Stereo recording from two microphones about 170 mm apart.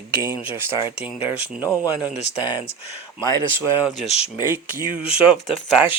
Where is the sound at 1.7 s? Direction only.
10° right (ahead or behind).